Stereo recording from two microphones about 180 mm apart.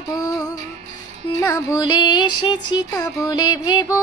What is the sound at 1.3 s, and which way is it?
Music, 15° left (ahead or behind).